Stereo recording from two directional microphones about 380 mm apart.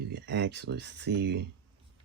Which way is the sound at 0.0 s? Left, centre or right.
Right.